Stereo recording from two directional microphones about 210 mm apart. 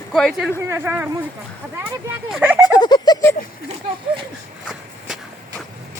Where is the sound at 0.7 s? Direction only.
10° right (ahead or behind).